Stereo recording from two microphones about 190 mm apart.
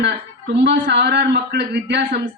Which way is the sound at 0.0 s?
65° right (ahead or behind).